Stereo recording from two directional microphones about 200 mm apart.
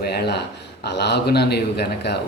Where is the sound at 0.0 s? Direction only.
55° left (ahead or behind).